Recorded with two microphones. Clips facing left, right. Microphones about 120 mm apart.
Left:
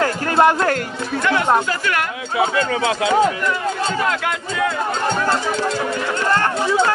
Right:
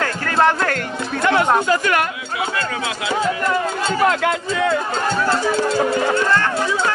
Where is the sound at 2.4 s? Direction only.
30° left (ahead or behind).